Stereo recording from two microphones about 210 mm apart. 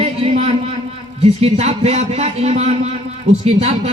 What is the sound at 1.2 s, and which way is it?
A man's voice, 30° right (ahead or behind).